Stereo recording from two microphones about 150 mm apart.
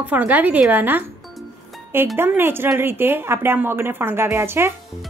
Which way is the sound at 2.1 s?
15° right (ahead or behind).